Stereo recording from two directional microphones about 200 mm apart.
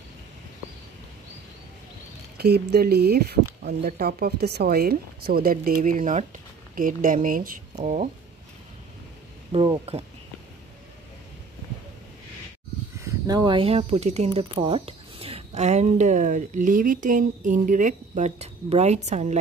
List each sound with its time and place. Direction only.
2.3 s speech: 55° right (ahead or behind); by 8.1 s 35° right (ahead or behind)
9.5 s speech: 25° right (ahead or behind)
13.0 s speech: 20° right (ahead or behind); by 19.2 s 35° right (ahead or behind)